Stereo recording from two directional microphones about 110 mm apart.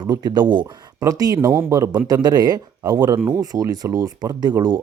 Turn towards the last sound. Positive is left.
turn(degrees=-35)  # may be behind; listen again after turning